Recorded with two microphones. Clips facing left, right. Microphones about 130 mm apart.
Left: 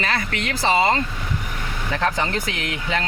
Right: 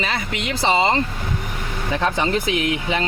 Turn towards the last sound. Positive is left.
turn(degrees=-15)  # may be behind; listen again after turning